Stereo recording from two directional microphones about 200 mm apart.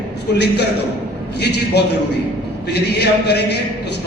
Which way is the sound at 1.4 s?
55° left (ahead or behind).